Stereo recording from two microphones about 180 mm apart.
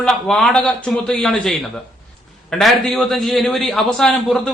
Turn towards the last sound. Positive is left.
turn(degrees=0)  # may be behind; listen again after turning